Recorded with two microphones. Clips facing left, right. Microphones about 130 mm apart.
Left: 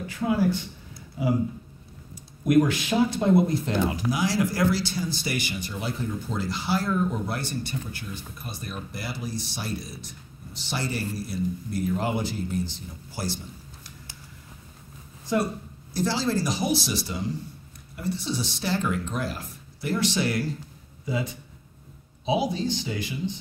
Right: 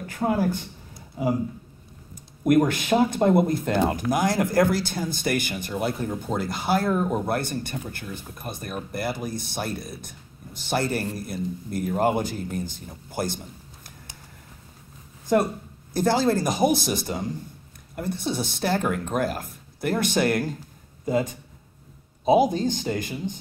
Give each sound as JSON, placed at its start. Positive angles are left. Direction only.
{"t": 0.0, "sound": "speech", "side_deg": -50}
{"t": 2.4, "sound": "speech", "side_deg": -50}
{"t": 15.3, "sound": "speech", "side_deg": -50}